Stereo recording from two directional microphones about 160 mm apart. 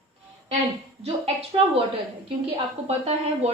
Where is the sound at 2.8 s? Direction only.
40° right (ahead or behind).